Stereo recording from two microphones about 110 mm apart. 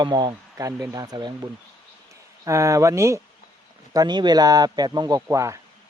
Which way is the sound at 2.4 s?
30° right (ahead or behind).